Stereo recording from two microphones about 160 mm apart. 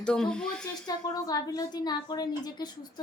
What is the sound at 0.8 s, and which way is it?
A woman's voice, 25° left (ahead or behind).